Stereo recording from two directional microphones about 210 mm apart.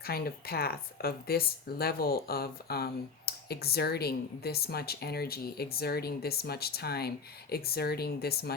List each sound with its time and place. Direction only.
0.0 s speech: 45° left (ahead or behind)